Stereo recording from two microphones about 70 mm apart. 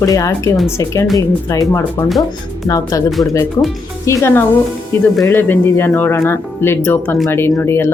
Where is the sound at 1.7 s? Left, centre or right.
Left.